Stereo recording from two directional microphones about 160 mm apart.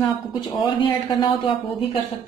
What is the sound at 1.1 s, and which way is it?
Speech, 30° left (ahead or behind).